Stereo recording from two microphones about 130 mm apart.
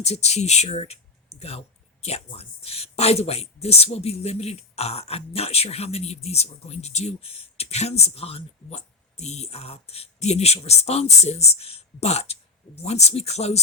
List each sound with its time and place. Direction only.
0.0 s speech: 55° left (ahead or behind)